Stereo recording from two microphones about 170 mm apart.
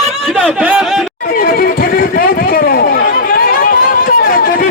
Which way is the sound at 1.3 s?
60° left (ahead or behind).